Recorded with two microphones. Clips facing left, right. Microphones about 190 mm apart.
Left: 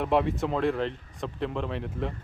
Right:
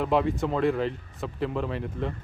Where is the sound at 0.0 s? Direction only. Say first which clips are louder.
Right 1 dB; centre (ahead or behind).